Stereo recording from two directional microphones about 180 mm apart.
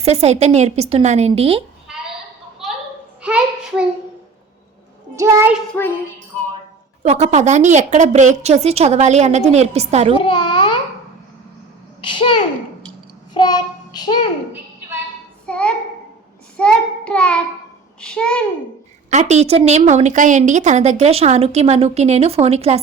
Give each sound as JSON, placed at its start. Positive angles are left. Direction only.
{"t": 0.0, "sound": "a woman's voice", "side_deg": -35}
{"t": 2.6, "sound": "children playing", "side_deg": 0}
{"t": 3.2, "sound": "a child's voice", "side_deg": -5}
{"t": 5.1, "sound": "a child's voice", "side_deg": -15}
{"t": 5.7, "sound": "child singing", "side_deg": 10}
{"t": 7.0, "sound": "a woman's voice", "side_deg": -40}
{"t": 10.2, "sound": "a child's voice", "side_deg": 25}
{"t": 12.0, "sound": "a child's voice", "side_deg": 25}
{"t": 13.3, "sound": "child singing", "side_deg": 25}
{"t": 15.4, "sound": "a child's voice", "side_deg": 5}
{"t": 16.6, "sound": "child singing", "side_deg": 5}
{"t": 18.0, "sound": "a child's voice", "side_deg": 5}
{"t": 19.1, "sound": "a woman's voice", "side_deg": -40}